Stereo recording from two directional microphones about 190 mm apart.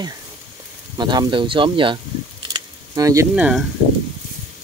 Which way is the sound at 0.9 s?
20° right (ahead or behind).